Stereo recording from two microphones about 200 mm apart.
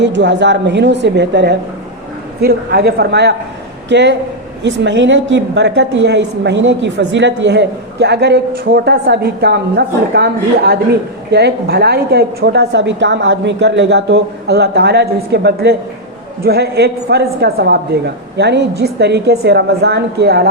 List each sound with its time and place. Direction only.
0.0 s a woman's voice: 60° right (ahead or behind)